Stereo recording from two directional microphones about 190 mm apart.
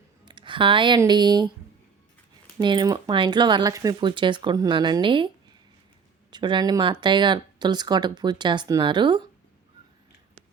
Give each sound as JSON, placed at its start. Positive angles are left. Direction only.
{"t": 0.3, "sound": "speech", "side_deg": -25}
{"t": 2.6, "sound": "speech", "side_deg": -25}
{"t": 6.3, "sound": "speech", "side_deg": -25}